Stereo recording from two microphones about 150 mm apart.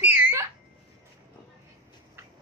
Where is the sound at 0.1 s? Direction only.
20° right (ahead or behind).